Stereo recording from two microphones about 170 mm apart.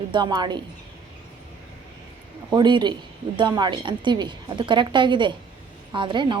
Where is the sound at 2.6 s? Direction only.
25° right (ahead or behind).